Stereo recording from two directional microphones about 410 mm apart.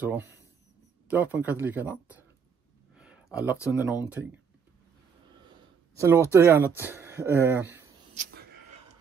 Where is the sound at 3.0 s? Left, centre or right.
Centre.